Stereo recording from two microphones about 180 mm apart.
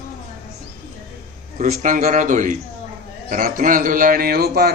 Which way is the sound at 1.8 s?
50° right (ahead or behind).